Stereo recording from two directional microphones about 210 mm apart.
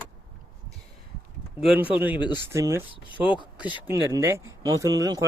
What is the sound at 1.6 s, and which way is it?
Speech, 5° right (ahead or behind).